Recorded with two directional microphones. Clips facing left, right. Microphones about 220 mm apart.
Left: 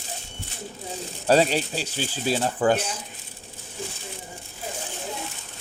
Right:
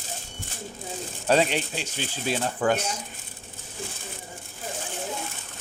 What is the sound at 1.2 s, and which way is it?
Speech, 35° left (ahead or behind).